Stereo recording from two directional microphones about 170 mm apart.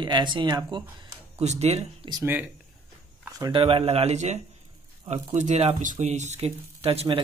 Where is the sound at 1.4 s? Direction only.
40° right (ahead or behind).